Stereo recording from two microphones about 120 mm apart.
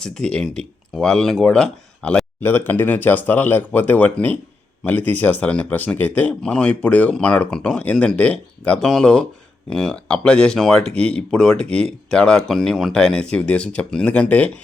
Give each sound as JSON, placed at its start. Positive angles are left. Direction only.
{"t": 0.0, "sound": "speech", "side_deg": 5}